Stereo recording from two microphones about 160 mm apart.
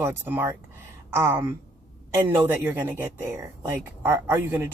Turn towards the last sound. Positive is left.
turn(degrees=-15)  # may be behind; listen again after turning